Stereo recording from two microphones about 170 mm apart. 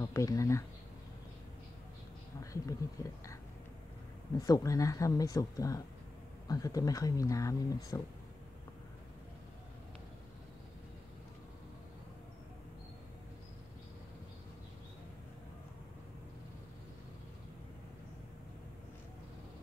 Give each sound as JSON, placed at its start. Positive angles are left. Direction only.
{"t": 0.0, "sound": "speech", "side_deg": 20}
{"t": 2.5, "sound": "speech", "side_deg": 20}
{"t": 4.4, "sound": "speech", "side_deg": 20}